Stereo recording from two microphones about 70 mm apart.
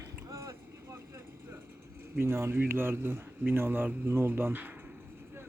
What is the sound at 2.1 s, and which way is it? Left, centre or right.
Speech, right.